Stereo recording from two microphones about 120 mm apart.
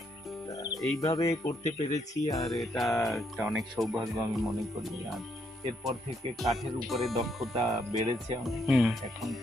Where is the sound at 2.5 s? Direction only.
Centre (ahead or behind).